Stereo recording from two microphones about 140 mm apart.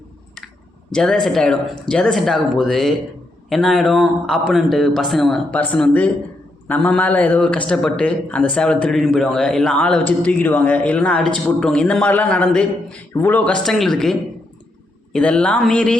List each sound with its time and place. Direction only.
0.9 s a man's voice: 5° left (ahead or behind)